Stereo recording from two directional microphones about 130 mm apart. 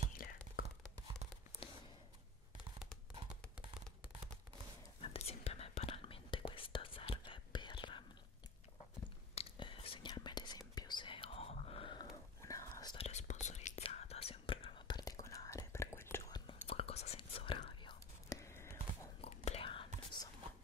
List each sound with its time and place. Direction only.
0.2 s whispering: 90° left
5.0 s whispering: 50° left (ahead or behind)
9.3 s whispering: 45° left (ahead or behind)
12.4 s whispering: 25° left (ahead or behind)
12.9 s whispering: 55° left (ahead or behind)
13.9 s whispering: 50° left (ahead or behind); by 16.3 s 20° left (ahead or behind)
16.3 s whispering: 30° left (ahead or behind)
16.6 s whispering: 45° left (ahead or behind)
18.3 s whispering: 20° left (ahead or behind)
19.2 s whispering: 50° left (ahead or behind)